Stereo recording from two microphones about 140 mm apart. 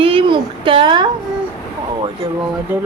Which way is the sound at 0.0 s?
40° right (ahead or behind).